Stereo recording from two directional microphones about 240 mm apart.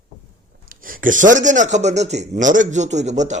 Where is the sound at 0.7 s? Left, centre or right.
Right.